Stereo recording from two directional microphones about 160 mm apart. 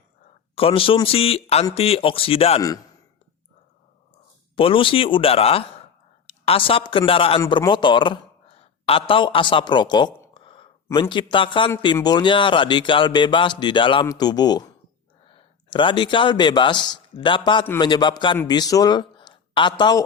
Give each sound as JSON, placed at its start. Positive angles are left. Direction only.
{"t": 0.5, "sound": "speech", "side_deg": 35}
{"t": 2.6, "sound": "speech", "side_deg": 20}
{"t": 4.5, "sound": "speech", "side_deg": 35}
{"t": 10.3, "sound": "a sound", "side_deg": 30}
{"t": 11.1, "sound": "a man's voice", "side_deg": 30}